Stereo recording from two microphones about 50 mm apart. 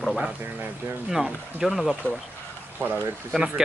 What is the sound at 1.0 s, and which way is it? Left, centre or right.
Speech, centre.